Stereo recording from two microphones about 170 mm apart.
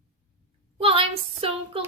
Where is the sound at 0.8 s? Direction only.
35° right (ahead or behind).